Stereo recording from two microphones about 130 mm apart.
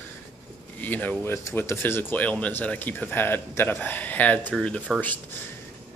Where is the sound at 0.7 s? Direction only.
15° left (ahead or behind).